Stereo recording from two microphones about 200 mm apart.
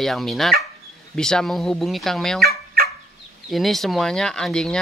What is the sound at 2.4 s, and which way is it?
Fowl, 50° right (ahead or behind).